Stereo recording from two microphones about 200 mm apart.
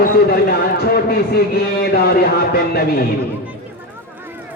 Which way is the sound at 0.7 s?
50° left (ahead or behind).